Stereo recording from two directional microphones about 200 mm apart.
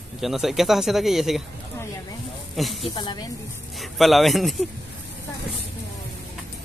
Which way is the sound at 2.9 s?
20° left (ahead or behind).